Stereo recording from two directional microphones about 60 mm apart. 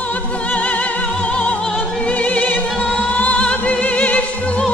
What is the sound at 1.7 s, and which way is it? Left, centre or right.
Music, left.